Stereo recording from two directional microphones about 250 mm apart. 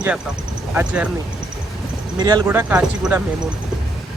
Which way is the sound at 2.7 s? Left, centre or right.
Centre.